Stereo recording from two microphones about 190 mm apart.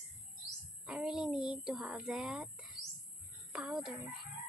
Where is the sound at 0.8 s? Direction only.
5° right (ahead or behind).